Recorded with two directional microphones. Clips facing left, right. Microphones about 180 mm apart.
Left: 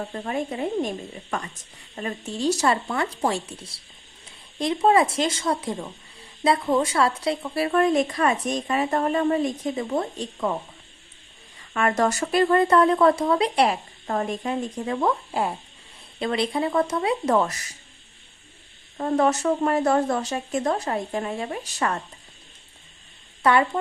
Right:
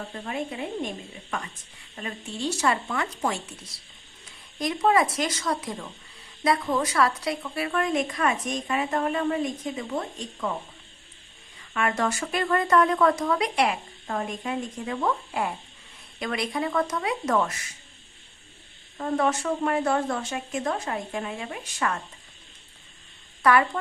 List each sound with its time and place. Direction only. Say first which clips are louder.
0.3 s a woman's voice: left 4 dB; 40° left (ahead or behind)
2.0 s a woman's voice: left 5 dB; 40° left (ahead or behind)
11.7 s a woman's voice: left 4 dB; 40° left (ahead or behind)
18.9 s a woman's voice: left 4 dB; 40° left (ahead or behind)
23.4 s speech: left 1 dB; 25° left (ahead or behind)